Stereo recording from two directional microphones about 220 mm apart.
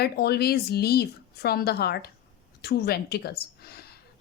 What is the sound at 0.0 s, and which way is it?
Speech, 45° left (ahead or behind).